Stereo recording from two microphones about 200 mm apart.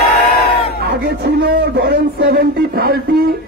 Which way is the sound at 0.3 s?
50° left (ahead or behind).